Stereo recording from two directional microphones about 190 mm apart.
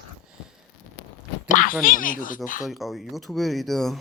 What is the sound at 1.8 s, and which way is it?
Speech, 45° left (ahead or behind).